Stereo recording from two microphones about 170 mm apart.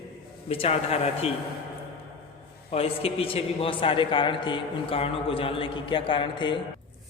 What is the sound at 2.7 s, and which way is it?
A man's voice, 35° left (ahead or behind).